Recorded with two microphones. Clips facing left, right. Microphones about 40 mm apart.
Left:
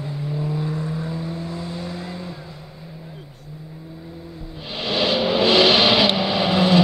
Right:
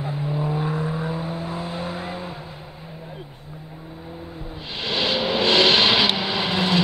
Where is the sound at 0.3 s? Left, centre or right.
Right.